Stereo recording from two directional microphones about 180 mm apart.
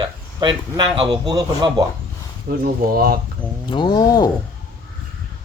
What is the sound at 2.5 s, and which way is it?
Speech, 60° right (ahead or behind).